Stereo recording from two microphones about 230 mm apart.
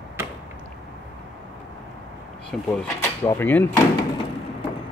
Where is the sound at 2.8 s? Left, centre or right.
Centre.